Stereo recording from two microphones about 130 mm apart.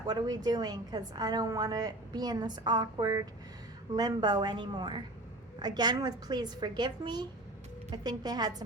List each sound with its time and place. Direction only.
0.0 s a woman's voice: 30° right (ahead or behind)